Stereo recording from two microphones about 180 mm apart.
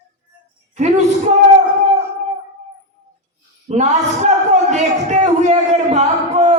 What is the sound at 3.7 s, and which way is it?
A man's voice, 40° right (ahead or behind).